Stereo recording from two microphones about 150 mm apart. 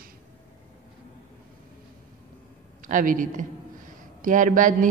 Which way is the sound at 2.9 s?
65° right (ahead or behind).